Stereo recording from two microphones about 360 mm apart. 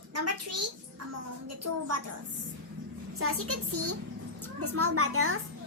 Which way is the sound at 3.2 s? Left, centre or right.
Right.